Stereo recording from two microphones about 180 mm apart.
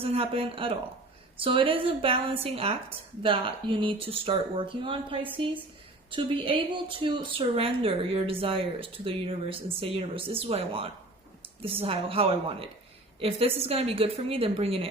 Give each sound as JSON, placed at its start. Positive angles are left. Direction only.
{"t": 0.0, "sound": "speech", "side_deg": -30}